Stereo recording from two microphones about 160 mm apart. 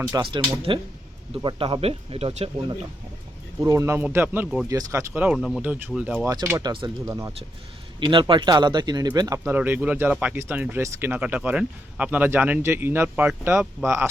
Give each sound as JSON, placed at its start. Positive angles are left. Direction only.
{"t": 0.1, "sound": "speech", "side_deg": -30}
{"t": 3.6, "sound": "speech", "side_deg": -20}
{"t": 6.2, "sound": "speech", "side_deg": -20}
{"t": 8.1, "sound": "speech", "side_deg": -30}
{"t": 9.5, "sound": "speech", "side_deg": -10}